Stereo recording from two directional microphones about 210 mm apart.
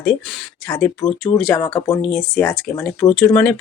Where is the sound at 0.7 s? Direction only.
10° left (ahead or behind).